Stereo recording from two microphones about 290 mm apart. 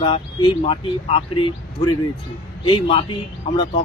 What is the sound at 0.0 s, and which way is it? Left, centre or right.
Speech, centre.